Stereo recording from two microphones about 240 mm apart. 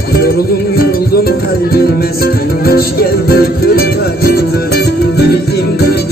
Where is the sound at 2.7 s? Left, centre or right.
Left.